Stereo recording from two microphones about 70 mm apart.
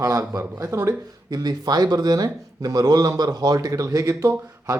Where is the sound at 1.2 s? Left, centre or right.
Right.